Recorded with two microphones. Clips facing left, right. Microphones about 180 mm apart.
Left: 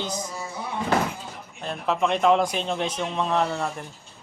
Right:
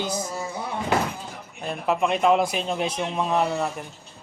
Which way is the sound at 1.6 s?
10° right (ahead or behind).